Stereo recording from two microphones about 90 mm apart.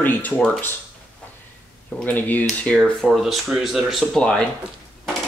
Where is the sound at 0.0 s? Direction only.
20° left (ahead or behind).